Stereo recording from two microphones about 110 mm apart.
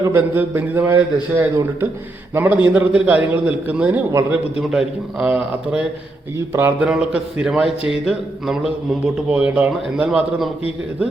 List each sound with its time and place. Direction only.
0.0 s a man's voice: 25° right (ahead or behind)
4.7 s speech: 5° right (ahead or behind)
6.5 s a man's voice: 20° right (ahead or behind)
6.8 s a man's voice: 10° right (ahead or behind)